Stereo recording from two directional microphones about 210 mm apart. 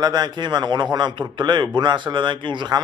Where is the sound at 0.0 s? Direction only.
20° right (ahead or behind).